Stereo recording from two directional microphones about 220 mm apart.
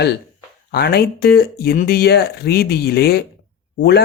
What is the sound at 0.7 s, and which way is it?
A man's voice, 45° left (ahead or behind).